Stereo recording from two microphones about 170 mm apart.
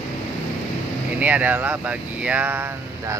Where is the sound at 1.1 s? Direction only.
10° right (ahead or behind).